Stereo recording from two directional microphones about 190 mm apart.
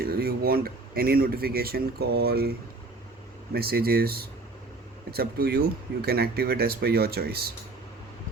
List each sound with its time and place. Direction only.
0.0 s speech: 55° right (ahead or behind)